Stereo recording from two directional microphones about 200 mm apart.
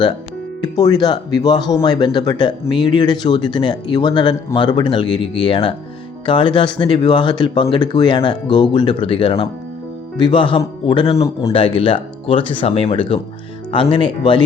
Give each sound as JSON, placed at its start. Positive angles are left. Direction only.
{"t": 0.8, "sound": "speech", "side_deg": 20}